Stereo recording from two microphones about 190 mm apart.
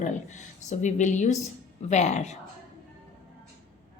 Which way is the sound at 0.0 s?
40° left (ahead or behind).